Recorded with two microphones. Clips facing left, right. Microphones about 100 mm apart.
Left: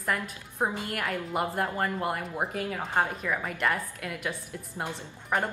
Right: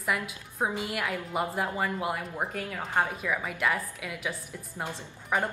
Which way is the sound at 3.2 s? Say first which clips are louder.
Even; centre (ahead or behind).